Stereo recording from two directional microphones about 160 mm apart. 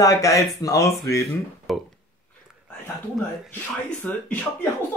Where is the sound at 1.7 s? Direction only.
Centre (ahead or behind).